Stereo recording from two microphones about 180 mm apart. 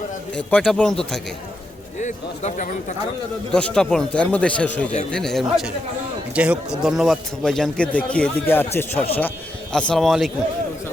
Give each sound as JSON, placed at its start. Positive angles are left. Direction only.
{"t": 0.3, "sound": "a man's voice", "side_deg": 5}
{"t": 2.0, "sound": "speech", "side_deg": 40}
{"t": 3.5, "sound": "a man's voice", "side_deg": 5}